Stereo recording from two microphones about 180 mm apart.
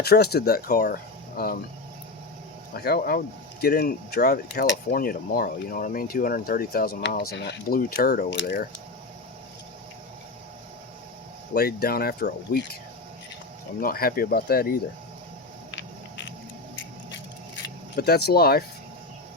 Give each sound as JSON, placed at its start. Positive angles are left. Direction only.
{"t": 0.0, "sound": "speech", "side_deg": 60}
{"t": 2.7, "sound": "speech", "side_deg": 60}
{"t": 4.9, "sound": "speech", "side_deg": 55}
{"t": 11.5, "sound": "speech", "side_deg": 60}
{"t": 13.7, "sound": "speech", "side_deg": 55}
{"t": 15.7, "sound": "a sound", "side_deg": 85}
{"t": 17.9, "sound": "speech", "side_deg": 65}